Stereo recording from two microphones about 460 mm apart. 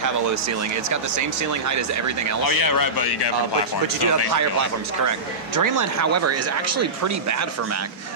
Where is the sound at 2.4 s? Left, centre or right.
Left.